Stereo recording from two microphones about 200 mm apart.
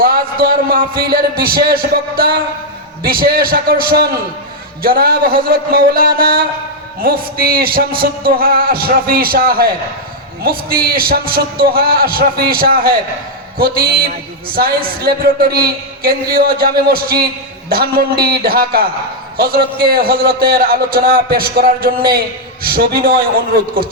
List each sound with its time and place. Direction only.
0.0 s a man's voice: 45° right (ahead or behind)